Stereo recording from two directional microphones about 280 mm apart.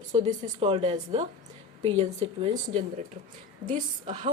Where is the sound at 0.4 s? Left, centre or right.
Right.